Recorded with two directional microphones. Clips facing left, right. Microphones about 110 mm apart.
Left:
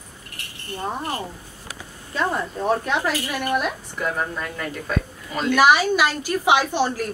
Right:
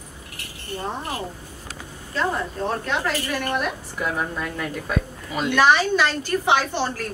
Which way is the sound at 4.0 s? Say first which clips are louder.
Left 1 dB; centre (ahead or behind).